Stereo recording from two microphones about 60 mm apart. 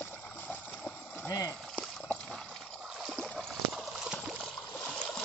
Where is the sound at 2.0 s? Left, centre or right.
Centre.